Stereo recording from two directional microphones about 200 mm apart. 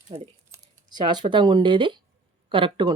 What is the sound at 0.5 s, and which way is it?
Speech, 20° right (ahead or behind).